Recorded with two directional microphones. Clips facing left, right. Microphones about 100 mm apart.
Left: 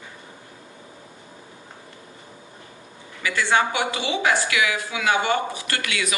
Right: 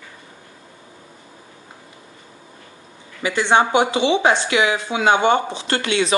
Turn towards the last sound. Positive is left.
turn(degrees=-30)  # may be behind; listen again after turning